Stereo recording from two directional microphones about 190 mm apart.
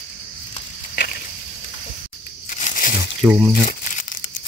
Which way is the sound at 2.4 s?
40° left (ahead or behind).